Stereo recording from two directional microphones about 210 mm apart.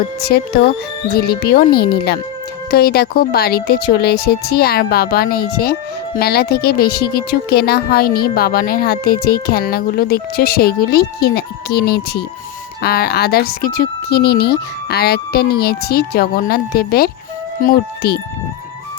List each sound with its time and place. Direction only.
0.3 s speech: 50° left (ahead or behind)